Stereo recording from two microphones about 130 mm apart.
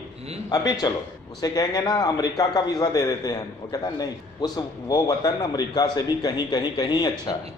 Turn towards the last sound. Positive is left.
turn(degrees=30)  # may be behind; listen again after turning